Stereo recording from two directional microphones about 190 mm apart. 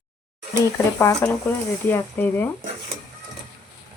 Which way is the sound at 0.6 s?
15° left (ahead or behind).